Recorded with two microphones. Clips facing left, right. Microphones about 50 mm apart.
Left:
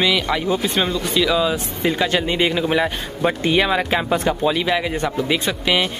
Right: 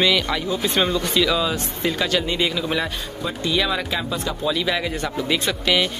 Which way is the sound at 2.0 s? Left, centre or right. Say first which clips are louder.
Left 3 dB; left.